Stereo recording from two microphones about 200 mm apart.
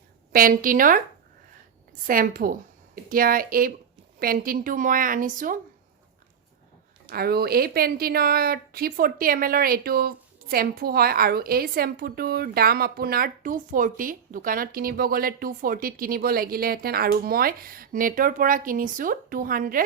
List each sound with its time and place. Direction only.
0.3 s a woman's voice: 45° right (ahead or behind)
2.0 s a woman's voice: 45° right (ahead or behind)
7.1 s a woman's voice: 50° right (ahead or behind)